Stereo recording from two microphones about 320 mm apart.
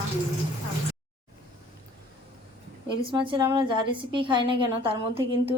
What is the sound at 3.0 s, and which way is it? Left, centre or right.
A woman's voice, centre.